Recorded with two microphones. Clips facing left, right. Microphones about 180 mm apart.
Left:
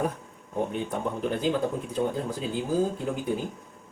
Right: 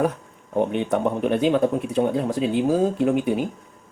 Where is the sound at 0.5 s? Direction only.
75° right (ahead or behind).